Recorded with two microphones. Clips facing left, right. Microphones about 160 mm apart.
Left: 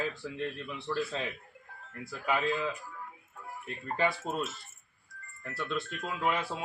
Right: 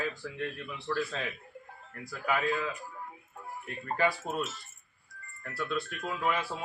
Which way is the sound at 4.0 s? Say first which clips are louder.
Right 1 dB; 20° left (ahead or behind).